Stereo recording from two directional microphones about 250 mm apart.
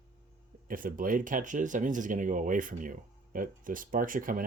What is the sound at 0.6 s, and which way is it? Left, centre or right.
Speech, right.